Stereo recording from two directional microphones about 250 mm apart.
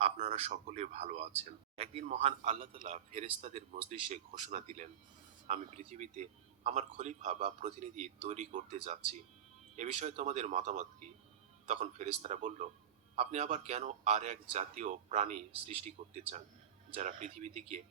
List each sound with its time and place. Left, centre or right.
0.0 s a man's voice: right